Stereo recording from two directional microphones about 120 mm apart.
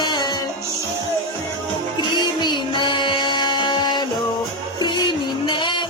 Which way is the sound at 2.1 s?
40° left (ahead or behind).